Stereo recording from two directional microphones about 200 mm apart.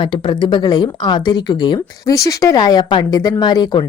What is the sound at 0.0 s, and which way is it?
A woman's voice, 25° left (ahead or behind).